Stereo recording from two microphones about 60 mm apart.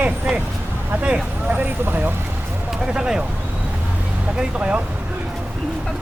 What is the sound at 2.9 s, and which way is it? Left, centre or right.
Speech, centre.